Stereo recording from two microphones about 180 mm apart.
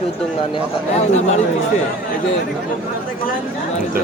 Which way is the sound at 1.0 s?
40° left (ahead or behind).